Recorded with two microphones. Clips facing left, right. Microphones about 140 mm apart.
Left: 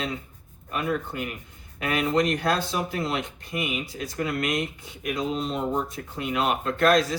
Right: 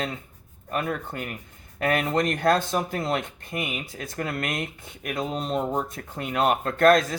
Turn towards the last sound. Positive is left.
turn(degrees=-50)  # may be behind; listen again after turning